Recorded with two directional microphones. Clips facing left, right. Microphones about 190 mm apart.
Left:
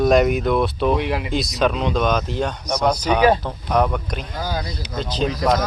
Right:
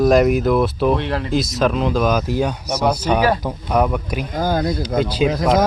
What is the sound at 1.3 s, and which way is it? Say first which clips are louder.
Speech: right 4 dB; centre (ahead or behind).